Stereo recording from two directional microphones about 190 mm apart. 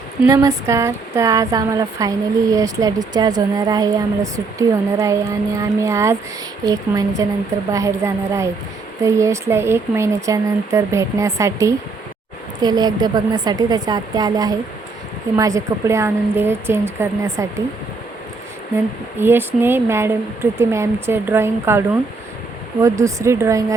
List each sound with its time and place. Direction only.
0.3 s a woman's voice: 15° right (ahead or behind)
19.2 s speech: 10° right (ahead or behind)